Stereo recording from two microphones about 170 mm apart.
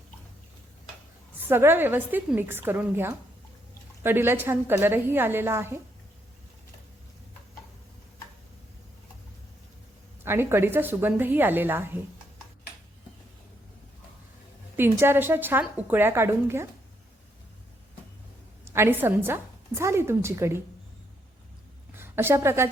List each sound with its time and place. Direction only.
1.5 s a woman's voice: 15° right (ahead or behind)
10.2 s a woman's voice: 15° right (ahead or behind)
14.8 s a woman's voice: 15° right (ahead or behind)
18.6 s a woman's voice: 15° right (ahead or behind)
21.9 s a woman's voice: 15° right (ahead or behind)